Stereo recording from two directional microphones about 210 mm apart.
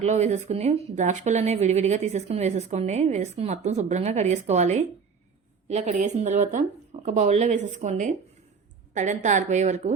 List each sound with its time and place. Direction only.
0.0 s speech: 35° right (ahead or behind)